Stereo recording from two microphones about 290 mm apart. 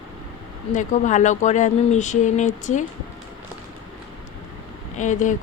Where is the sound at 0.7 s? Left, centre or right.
Left.